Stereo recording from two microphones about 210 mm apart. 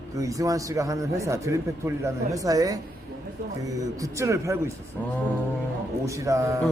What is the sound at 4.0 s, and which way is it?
Speech, 15° right (ahead or behind).